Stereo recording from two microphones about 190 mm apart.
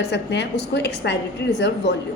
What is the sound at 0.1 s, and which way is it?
A woman's voice, 65° left (ahead or behind).